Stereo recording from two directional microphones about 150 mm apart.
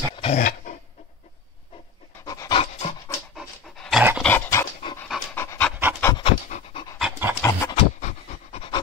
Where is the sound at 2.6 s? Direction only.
45° left (ahead or behind).